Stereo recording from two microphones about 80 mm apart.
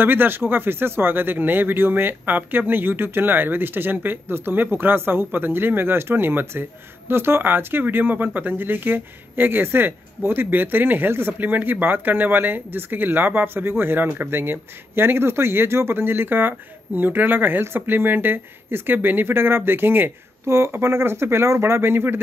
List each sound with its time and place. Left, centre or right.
0.0 s speech: right